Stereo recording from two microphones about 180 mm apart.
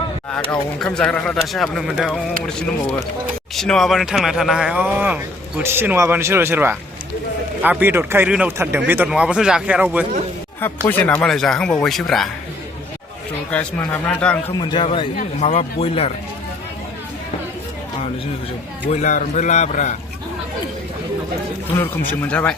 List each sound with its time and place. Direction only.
0.8 s speech: 5° left (ahead or behind)
3.5 s speech: centre (ahead or behind)
10.8 s speech: 10° left (ahead or behind)
13.5 s speech: 5° left (ahead or behind)
14.5 s a man's voice: 25° left (ahead or behind)
15.1 s a man's voice: 35° left (ahead or behind)
18.9 s a man's voice: 45° left (ahead or behind)
22.2 s speech: 10° left (ahead or behind)